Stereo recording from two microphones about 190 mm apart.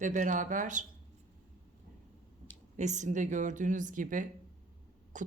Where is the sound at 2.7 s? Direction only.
40° right (ahead or behind).